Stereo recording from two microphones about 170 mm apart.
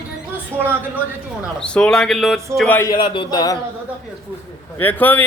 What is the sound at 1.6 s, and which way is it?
Speech, 5° left (ahead or behind).